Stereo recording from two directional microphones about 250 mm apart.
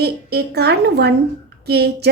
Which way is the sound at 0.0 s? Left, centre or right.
Right.